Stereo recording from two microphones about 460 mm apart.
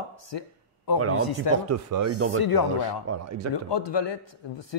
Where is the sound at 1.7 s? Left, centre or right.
Right.